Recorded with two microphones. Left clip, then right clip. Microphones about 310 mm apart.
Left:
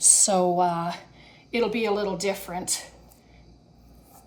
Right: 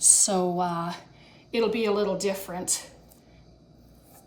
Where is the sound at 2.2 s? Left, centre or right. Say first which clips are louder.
Left 1 dB; left.